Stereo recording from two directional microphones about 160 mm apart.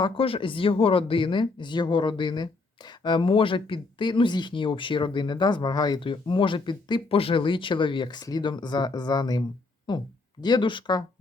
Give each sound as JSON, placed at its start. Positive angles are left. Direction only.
{"t": 0.0, "sound": "speech", "side_deg": 35}